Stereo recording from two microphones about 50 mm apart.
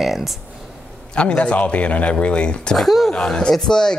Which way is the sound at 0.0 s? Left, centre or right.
Centre.